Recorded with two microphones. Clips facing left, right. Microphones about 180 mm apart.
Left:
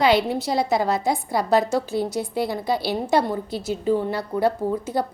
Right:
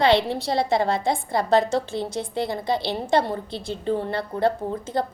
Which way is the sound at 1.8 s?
25° right (ahead or behind).